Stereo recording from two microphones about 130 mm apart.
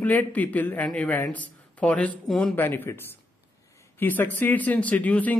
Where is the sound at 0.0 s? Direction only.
10° left (ahead or behind).